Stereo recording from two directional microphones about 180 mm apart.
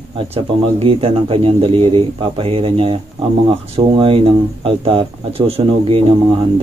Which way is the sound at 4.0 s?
30° right (ahead or behind).